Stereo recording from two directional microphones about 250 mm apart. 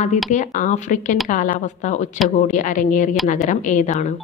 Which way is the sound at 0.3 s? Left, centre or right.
Left.